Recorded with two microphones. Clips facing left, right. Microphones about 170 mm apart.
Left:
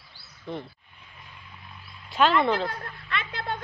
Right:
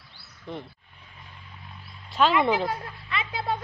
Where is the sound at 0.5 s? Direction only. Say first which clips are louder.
Left 2 dB; centre (ahead or behind).